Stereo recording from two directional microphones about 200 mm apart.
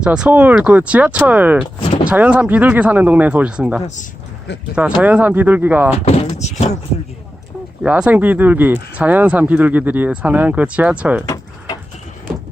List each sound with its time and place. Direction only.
0.0 s speech: 5° right (ahead or behind)
4.9 s speech: 5° right (ahead or behind)
6.1 s speech: 35° left (ahead or behind)
7.9 s speech: 5° right (ahead or behind)